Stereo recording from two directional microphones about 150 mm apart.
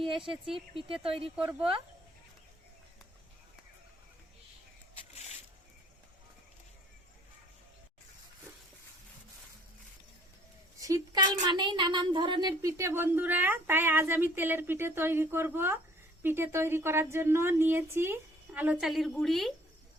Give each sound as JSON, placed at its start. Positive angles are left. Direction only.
{"t": 0.0, "sound": "a sound", "side_deg": -35}
{"t": 0.5, "sound": "speech", "side_deg": -35}
{"t": 4.9, "sound": "zipper", "side_deg": 45}
{"t": 10.8, "sound": "speech", "side_deg": -20}